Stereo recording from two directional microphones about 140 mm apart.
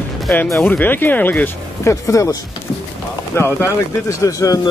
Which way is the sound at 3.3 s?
15° left (ahead or behind).